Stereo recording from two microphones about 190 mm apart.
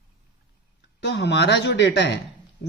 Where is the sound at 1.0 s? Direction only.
65° left (ahead or behind).